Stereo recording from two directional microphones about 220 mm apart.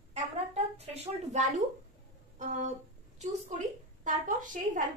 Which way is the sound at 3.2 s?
35° right (ahead or behind).